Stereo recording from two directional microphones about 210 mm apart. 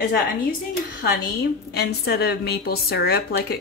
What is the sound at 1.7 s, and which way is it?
A woman's voice, 50° left (ahead or behind).